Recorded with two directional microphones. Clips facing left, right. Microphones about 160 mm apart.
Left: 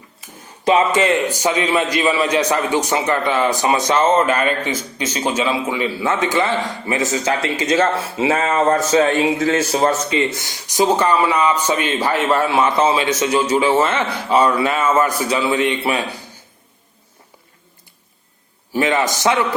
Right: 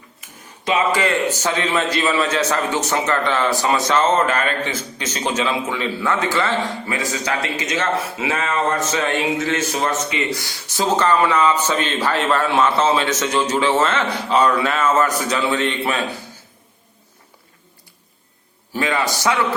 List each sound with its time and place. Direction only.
0.2 s a sound: 35° left (ahead or behind)
0.9 s a man's voice: 20° left (ahead or behind)
18.7 s a man's voice: 20° left (ahead or behind)